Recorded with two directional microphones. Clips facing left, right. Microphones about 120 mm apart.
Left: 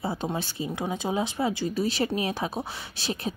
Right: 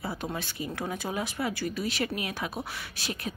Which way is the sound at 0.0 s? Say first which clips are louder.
Left 4 dB; 25° left (ahead or behind).